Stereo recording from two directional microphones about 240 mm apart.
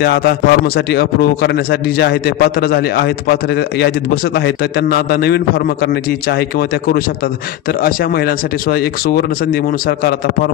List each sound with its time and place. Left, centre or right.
0.0 s a man's voice: left
7.8 s a man's voice: left